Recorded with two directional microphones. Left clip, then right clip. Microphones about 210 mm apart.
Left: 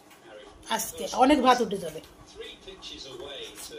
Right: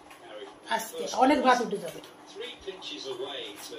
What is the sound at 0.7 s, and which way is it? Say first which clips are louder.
Speech: even; 50° left (ahead or behind).